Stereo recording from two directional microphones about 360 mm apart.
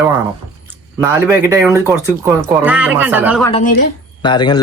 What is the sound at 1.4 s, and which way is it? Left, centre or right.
Speech, centre.